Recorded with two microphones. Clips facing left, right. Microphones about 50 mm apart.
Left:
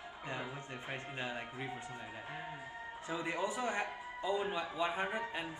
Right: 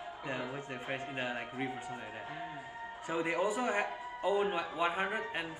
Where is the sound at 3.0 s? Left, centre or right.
Right.